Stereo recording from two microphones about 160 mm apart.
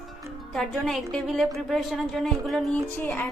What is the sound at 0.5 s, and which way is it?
A woman's voice, centre (ahead or behind).